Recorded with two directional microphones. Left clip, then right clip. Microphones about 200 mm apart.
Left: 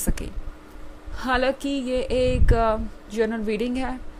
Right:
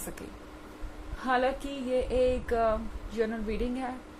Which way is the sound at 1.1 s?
45° left (ahead or behind).